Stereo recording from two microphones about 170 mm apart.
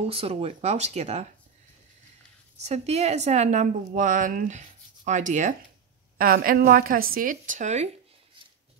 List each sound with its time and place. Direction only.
0.0 s speech: 35° right (ahead or behind)
2.6 s a woman's voice: 40° right (ahead or behind)
6.1 s a woman's voice: 55° right (ahead or behind)